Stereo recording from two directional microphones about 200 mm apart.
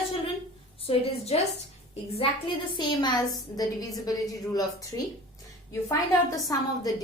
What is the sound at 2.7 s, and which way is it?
A woman's voice, 20° left (ahead or behind).